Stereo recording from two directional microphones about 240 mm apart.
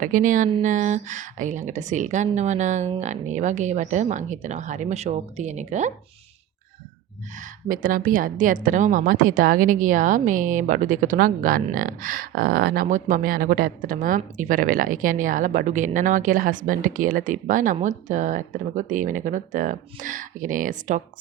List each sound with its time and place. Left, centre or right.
0.0 s speech: right
7.3 s a woman's voice: right